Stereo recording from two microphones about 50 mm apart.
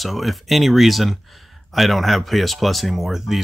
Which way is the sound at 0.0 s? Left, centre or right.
Centre.